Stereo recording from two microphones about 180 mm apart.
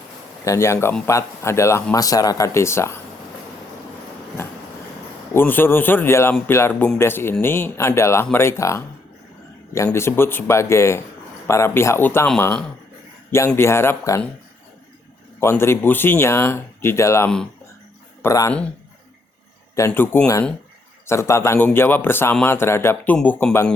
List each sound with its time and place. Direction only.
0.4 s speech: 15° left (ahead or behind)
5.3 s speech: 10° left (ahead or behind)
15.4 s a man's voice: 15° left (ahead or behind)
19.7 s speech: 15° left (ahead or behind)